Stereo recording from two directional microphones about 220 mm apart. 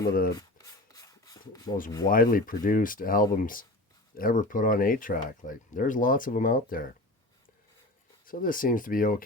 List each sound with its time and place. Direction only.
0.3 s rub: 15° left (ahead or behind)
2.0 s speech: 40° left (ahead or behind)
8.2 s speech: 40° left (ahead or behind)